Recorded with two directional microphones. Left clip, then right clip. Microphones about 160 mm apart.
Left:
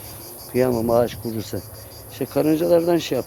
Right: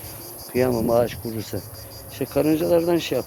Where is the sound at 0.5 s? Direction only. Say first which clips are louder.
Left 1 dB; 35° left (ahead or behind).